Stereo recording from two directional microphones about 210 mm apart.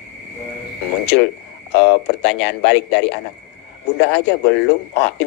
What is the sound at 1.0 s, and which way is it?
Speech, 55° left (ahead or behind).